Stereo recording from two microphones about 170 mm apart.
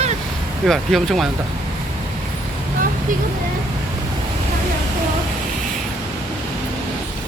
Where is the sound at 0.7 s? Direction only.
Centre (ahead or behind).